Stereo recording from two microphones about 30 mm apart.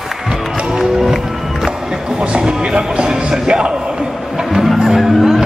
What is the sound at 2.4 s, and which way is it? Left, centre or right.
Music, right.